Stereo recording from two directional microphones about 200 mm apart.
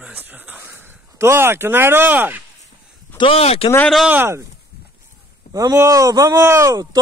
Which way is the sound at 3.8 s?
5° right (ahead or behind).